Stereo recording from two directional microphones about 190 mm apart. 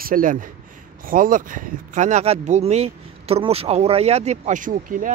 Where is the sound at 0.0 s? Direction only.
45° right (ahead or behind).